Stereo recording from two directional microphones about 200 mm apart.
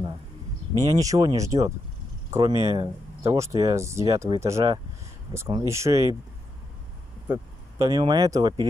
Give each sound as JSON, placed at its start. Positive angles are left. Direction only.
{"t": 0.8, "sound": "speech", "side_deg": -15}
{"t": 7.8, "sound": "speech", "side_deg": -20}